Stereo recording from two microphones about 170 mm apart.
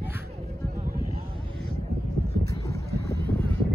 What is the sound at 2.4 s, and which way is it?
Vehicle, 20° left (ahead or behind).